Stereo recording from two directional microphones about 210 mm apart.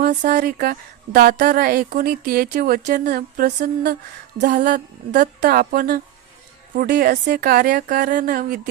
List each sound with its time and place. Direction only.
0.0 s a woman's voice: 45° right (ahead or behind)